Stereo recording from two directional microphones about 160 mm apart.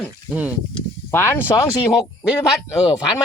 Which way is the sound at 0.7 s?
15° left (ahead or behind).